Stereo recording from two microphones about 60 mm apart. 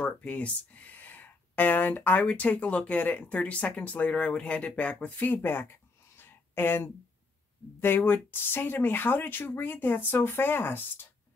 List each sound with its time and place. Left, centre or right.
0.0 s speech: left
5.0 s a sound: left
7.8 s speech: left